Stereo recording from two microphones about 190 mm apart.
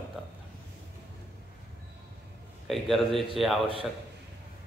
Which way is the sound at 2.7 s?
Centre (ahead or behind).